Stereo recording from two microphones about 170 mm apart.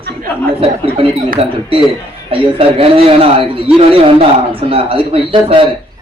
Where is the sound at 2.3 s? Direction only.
35° right (ahead or behind).